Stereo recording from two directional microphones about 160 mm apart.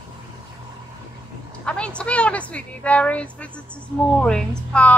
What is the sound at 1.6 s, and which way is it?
Speech, 5° left (ahead or behind).